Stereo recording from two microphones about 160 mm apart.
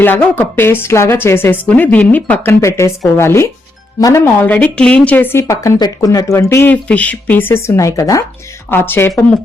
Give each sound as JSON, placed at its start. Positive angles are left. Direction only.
{"t": 0.0, "sound": "speech", "side_deg": 10}